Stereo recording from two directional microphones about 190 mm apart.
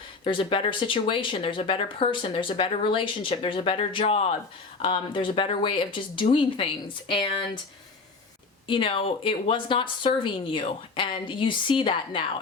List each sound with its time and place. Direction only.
0.3 s speech: 25° left (ahead or behind)
8.6 s speech: 25° left (ahead or behind)